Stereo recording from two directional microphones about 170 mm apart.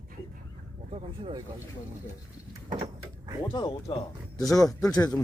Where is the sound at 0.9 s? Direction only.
30° right (ahead or behind).